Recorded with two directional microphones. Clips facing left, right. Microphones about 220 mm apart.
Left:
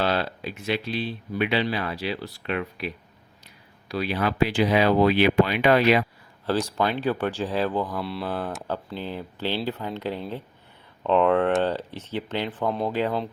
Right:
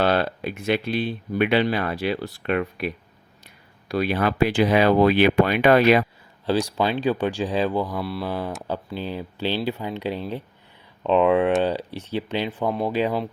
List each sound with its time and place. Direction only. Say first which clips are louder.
0.0 s speech: right 4 dB; 55° right (ahead or behind)
6.4 s speech: right 2 dB; 15° right (ahead or behind)
7.9 s speech: right 2 dB; centre (ahead or behind)
12.6 s speech: right 1 dB; 5° right (ahead or behind)
12.9 s speech: right 2 dB; 15° right (ahead or behind)